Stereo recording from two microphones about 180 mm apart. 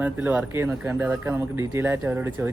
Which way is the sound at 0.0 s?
10° right (ahead or behind).